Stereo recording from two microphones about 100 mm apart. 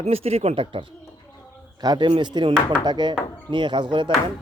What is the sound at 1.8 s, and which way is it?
A man's voice, 45° right (ahead or behind).